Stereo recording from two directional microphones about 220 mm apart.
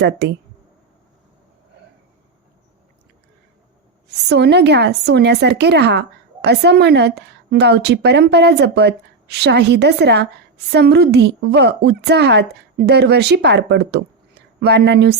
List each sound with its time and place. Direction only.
0.0 s a woman's voice: 50° right (ahead or behind)
4.1 s a woman's voice: 50° right (ahead or behind)